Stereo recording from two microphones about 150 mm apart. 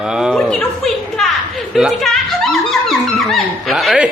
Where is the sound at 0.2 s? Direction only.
Centre (ahead or behind).